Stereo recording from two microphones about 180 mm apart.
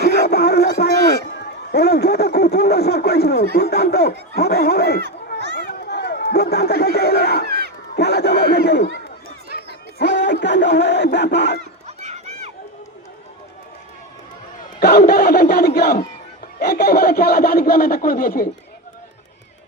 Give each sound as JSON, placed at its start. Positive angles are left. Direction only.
{"t": 0.3, "sound": "music", "side_deg": 60}
{"t": 1.7, "sound": "a sound", "side_deg": 65}
{"t": 3.5, "sound": "speech", "side_deg": 60}
{"t": 5.5, "sound": "a sound", "side_deg": 65}
{"t": 7.9, "sound": "speech", "side_deg": 65}
{"t": 10.0, "sound": "speech", "side_deg": 75}
{"t": 11.9, "sound": "run", "side_deg": -40}
{"t": 14.8, "sound": "speech", "side_deg": 65}